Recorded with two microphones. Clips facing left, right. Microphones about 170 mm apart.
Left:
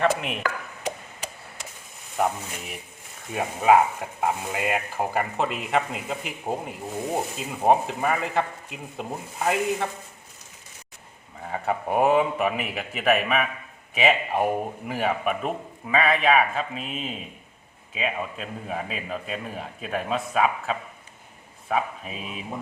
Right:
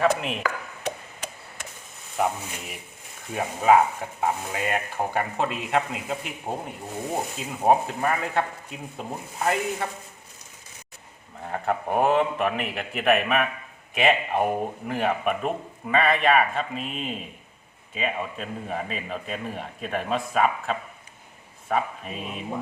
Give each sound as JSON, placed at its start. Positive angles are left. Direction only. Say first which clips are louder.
{"t": 0.0, "sound": "speech", "louder": "right 1 dB", "side_deg": 5}
{"t": 2.2, "sound": "speech", "louder": "even", "side_deg": 0}
{"t": 11.4, "sound": "speech", "louder": "even", "side_deg": 0}